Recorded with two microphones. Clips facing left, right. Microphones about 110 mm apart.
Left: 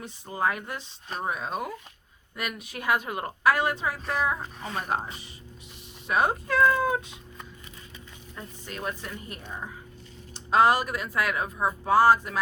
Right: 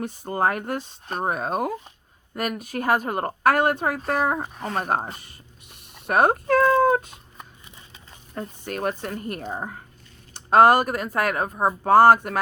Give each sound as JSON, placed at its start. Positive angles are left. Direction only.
{"t": 0.0, "sound": "speech", "side_deg": -50}
{"t": 8.4, "sound": "speech", "side_deg": -55}